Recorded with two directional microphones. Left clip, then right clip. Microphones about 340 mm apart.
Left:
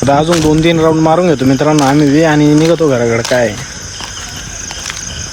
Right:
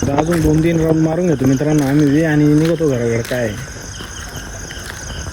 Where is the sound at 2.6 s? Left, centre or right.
Left.